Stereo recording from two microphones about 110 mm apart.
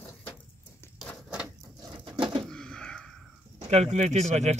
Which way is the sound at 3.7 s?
75° right (ahead or behind).